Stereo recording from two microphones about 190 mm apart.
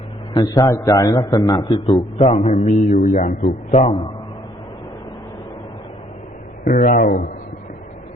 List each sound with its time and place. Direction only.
0.3 s a man's voice: 20° left (ahead or behind)
2.6 s a man's voice: 40° left (ahead or behind)
6.7 s speech: 55° left (ahead or behind)